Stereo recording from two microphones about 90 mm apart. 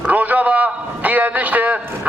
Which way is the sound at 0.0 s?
15° right (ahead or behind).